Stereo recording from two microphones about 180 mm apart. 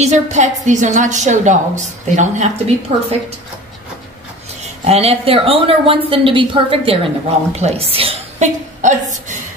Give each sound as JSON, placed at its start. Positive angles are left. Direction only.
{"t": 0.0, "sound": "a woman's voice", "side_deg": -40}
{"t": 4.8, "sound": "a woman's voice", "side_deg": -35}